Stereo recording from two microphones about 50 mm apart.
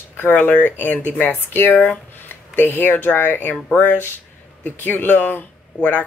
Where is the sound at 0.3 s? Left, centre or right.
Left.